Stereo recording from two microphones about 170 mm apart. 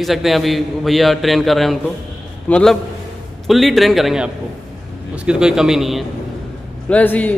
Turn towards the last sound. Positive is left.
turn(degrees=10)  # may be behind; listen again after turning